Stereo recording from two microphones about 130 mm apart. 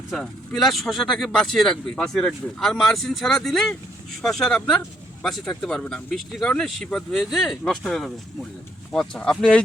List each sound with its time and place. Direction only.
0.1 s speech: centre (ahead or behind)